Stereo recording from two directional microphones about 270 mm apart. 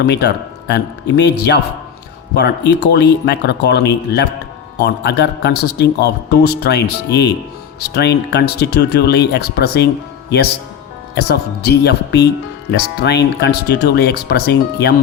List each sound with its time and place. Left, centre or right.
0.0 s speech: left